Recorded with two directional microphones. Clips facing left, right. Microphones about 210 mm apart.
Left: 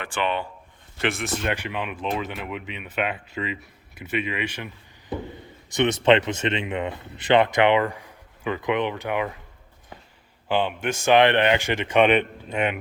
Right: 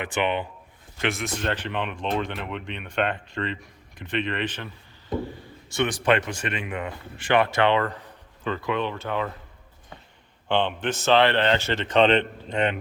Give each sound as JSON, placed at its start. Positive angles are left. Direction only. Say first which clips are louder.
{"t": 0.0, "sound": "speech", "louder": "right 1 dB", "side_deg": -20}
{"t": 1.0, "sound": "speech", "louder": "left 1 dB", "side_deg": 0}
{"t": 10.5, "sound": "speech", "louder": "even", "side_deg": 10}